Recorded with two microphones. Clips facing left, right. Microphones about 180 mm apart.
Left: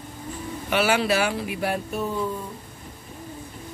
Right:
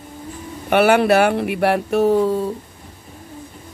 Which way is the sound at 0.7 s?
60° right (ahead or behind).